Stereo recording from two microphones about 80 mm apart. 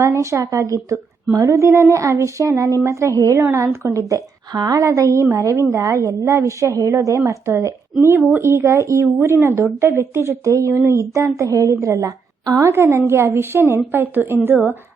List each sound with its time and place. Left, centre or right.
0.0 s a woman's voice: right
4.1 s a woman's voice: right
4.8 s a woman's voice: right
12.5 s a woman's voice: right